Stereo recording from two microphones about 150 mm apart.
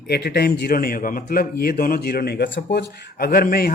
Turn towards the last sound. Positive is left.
turn(degrees=85)